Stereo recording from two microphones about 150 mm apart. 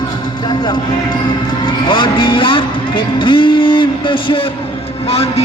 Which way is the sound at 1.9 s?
30° left (ahead or behind).